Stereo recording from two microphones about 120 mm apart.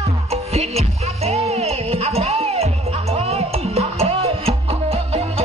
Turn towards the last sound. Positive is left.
turn(degrees=-55)  # may be behind; listen again after turning